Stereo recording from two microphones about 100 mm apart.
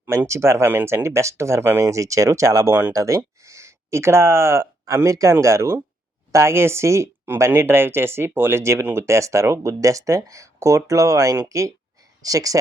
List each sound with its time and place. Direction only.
0.0 s speech: 25° right (ahead or behind)